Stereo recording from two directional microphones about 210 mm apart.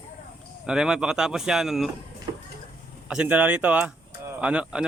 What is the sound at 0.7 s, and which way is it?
Speech, 5° right (ahead or behind).